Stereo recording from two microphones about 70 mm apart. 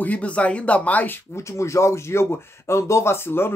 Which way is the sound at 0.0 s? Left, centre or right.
Left.